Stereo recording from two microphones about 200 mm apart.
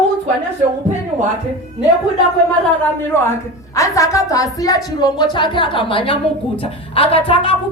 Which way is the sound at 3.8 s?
15° left (ahead or behind).